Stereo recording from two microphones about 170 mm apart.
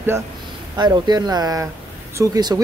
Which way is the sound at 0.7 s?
25° right (ahead or behind).